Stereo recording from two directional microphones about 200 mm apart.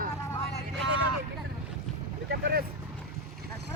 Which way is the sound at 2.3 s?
50° right (ahead or behind).